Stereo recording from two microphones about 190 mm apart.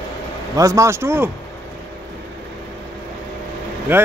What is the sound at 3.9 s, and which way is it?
Speech, 10° right (ahead or behind).